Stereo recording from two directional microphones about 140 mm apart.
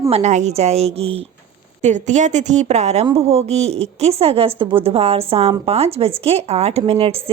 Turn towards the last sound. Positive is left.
turn(degrees=-40)  # may be behind; listen again after turning